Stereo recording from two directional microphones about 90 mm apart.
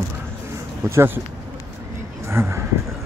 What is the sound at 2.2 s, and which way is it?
Speech, 30° right (ahead or behind).